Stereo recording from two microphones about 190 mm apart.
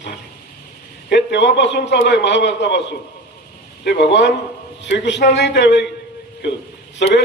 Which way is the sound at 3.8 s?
65° left (ahead or behind).